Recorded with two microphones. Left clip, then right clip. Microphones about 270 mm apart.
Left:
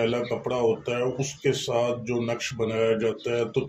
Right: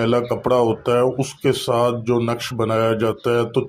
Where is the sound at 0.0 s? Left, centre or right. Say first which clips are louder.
Right 7 dB; right.